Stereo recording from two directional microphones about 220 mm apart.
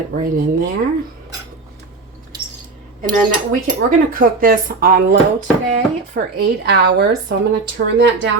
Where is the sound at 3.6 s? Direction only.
35° right (ahead or behind).